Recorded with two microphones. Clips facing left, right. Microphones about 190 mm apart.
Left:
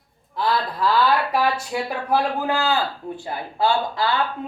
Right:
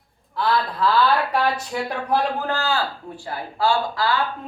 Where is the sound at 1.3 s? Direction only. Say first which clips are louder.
Left 1 dB; 5° left (ahead or behind).